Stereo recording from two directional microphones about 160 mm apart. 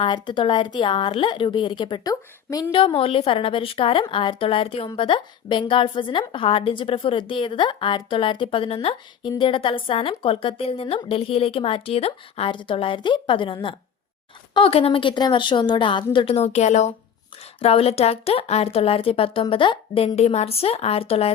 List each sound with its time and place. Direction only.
0.0 s a woman's voice: 30° left (ahead or behind)
2.7 s a woman's voice: 35° left (ahead or behind)